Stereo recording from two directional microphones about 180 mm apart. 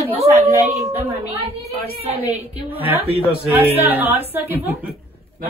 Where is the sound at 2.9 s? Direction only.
10° right (ahead or behind).